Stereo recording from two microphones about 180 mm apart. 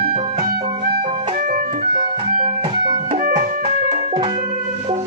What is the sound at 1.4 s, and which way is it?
Music, 50° right (ahead or behind).